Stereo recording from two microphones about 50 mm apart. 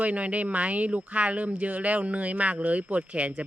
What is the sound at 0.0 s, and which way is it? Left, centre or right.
Speech, right.